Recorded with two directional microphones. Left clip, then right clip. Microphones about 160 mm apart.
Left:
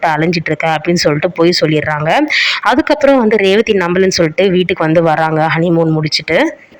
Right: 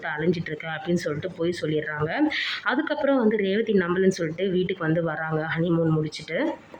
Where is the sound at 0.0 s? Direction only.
40° left (ahead or behind).